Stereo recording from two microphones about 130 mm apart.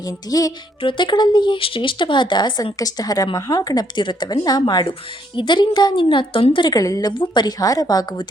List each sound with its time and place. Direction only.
0.0 s music: 30° left (ahead or behind)
0.8 s speech: 40° left (ahead or behind)
7.1 s speech: 35° left (ahead or behind)